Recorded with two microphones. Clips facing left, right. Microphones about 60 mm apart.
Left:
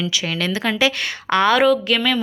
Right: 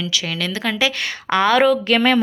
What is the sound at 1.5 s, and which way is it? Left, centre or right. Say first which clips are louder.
Speech: right 1 dB; centre.